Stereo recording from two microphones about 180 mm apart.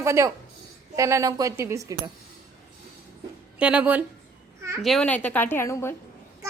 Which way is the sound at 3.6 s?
5° right (ahead or behind).